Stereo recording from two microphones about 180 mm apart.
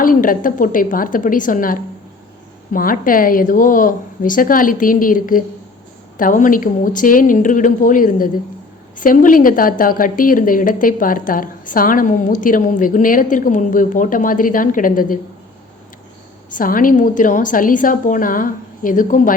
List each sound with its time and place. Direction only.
0.0 s a woman's voice: 50° left (ahead or behind)
16.5 s a woman's voice: 50° left (ahead or behind)